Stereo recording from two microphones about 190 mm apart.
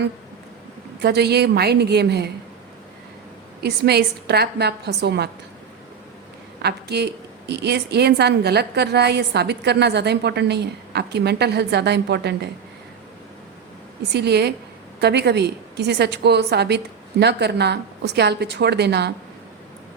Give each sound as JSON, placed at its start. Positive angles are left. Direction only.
{"t": 1.0, "sound": "a woman's voice", "side_deg": -60}
{"t": 3.6, "sound": "a woman's voice", "side_deg": -60}
{"t": 6.6, "sound": "a woman's voice", "side_deg": -60}
{"t": 14.1, "sound": "a woman's voice", "side_deg": -60}